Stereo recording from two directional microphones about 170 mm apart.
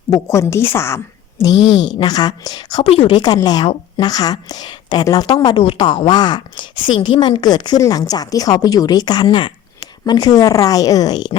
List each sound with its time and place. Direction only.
0.1 s a woman's voice: 15° left (ahead or behind)
1.5 s a woman's voice: 90° left
1.9 s a woman's voice: 25° left (ahead or behind)